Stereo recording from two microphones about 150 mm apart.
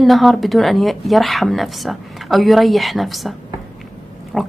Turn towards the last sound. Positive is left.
turn(degrees=0)  # may be behind; listen again after turning